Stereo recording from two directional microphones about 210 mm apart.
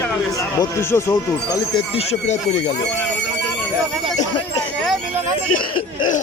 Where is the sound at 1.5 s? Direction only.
25° left (ahead or behind).